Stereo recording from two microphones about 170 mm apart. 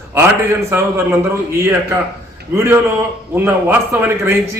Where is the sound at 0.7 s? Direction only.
15° right (ahead or behind).